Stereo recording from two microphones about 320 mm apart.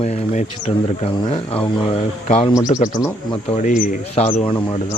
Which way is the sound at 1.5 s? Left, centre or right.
Centre.